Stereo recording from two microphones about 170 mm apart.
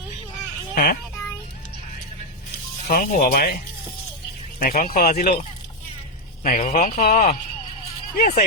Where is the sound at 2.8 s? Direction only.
55° left (ahead or behind).